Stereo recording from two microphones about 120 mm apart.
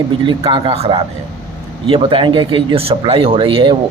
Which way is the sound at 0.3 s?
45° right (ahead or behind).